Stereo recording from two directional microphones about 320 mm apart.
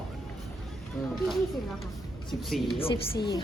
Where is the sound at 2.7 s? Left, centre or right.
Centre.